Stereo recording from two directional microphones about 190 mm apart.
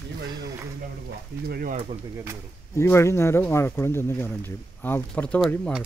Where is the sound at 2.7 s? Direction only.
15° left (ahead or behind).